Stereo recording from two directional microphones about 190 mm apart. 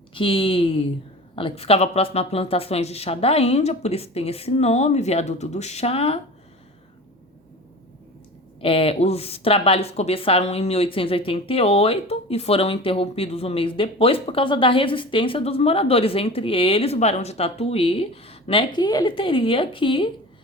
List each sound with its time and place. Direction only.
0.1 s a woman's voice: 30° left (ahead or behind)
8.6 s speech: 30° left (ahead or behind)